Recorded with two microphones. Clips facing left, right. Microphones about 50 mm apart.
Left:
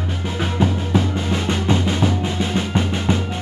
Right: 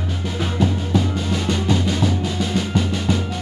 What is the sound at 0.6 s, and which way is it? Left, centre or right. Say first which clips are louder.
Music: left 1 dB; left.